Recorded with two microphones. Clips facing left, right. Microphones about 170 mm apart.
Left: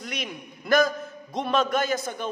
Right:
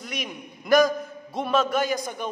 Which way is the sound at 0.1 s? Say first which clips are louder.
Right 2 dB; 10° right (ahead or behind).